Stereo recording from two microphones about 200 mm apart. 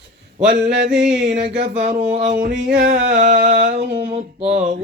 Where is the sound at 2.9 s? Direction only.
45° right (ahead or behind).